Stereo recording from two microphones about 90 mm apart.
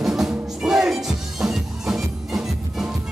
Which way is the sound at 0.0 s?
5° right (ahead or behind).